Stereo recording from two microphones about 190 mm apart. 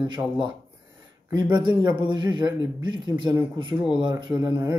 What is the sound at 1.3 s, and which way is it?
Speech, 25° right (ahead or behind).